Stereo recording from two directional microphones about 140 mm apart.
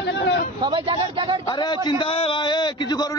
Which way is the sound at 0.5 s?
35° right (ahead or behind).